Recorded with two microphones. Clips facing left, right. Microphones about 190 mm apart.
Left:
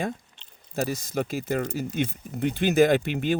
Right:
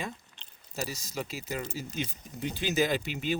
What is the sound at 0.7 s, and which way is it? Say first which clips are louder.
Speech: left 9 dB; 55° left (ahead or behind).